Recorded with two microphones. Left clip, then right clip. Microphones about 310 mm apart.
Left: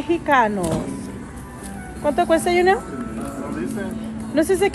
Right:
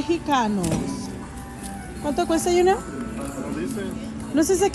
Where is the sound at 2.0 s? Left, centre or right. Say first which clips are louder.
Left 5 dB; right.